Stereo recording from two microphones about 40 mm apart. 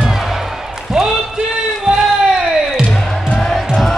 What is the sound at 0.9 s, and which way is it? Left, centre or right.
Basketball bounce, centre.